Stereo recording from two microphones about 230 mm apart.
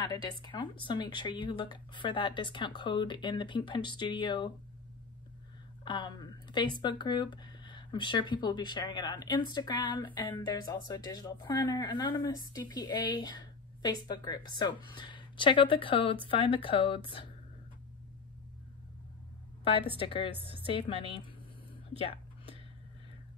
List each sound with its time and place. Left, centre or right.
0.0 s speech: centre
5.9 s a woman's voice: centre
19.6 s a woman's voice: left
20.3 s a woman's voice: right
20.6 s speech: left